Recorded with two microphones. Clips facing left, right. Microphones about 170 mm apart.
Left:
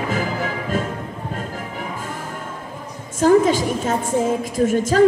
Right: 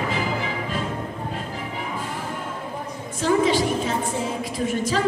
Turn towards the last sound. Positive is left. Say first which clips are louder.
# left 6 dB
turn(degrees=45)  # may be behind; listen again after turning